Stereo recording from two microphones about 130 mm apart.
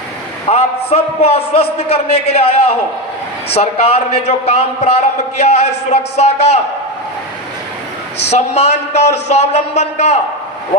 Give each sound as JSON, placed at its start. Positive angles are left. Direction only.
{"t": 0.4, "sound": "a man's voice", "side_deg": 50}
{"t": 8.3, "sound": "a man's voice", "side_deg": 55}